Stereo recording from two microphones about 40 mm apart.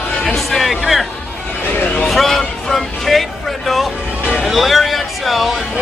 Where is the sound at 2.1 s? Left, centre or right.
Centre.